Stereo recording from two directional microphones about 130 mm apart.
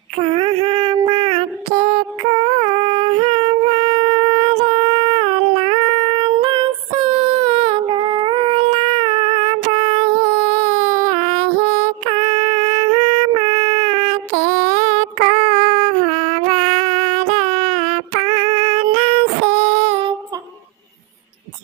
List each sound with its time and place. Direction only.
0.2 s child singing: 45° right (ahead or behind)
1.7 s music: 55° right (ahead or behind)
2.6 s a sound: 45° right (ahead or behind)
10.6 s child singing: 55° right (ahead or behind)